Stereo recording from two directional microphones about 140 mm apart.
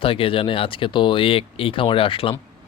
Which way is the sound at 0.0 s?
40° left (ahead or behind).